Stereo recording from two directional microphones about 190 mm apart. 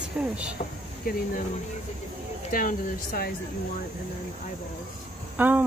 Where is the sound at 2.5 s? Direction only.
45° left (ahead or behind).